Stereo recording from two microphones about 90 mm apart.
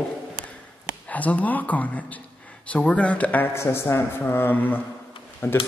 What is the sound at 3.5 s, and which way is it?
Speech, 30° left (ahead or behind).